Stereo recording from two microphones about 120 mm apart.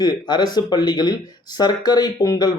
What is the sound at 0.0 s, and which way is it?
Speech, 35° left (ahead or behind).